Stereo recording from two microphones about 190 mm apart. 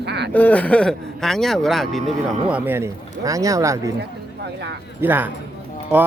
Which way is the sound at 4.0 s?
60° right (ahead or behind).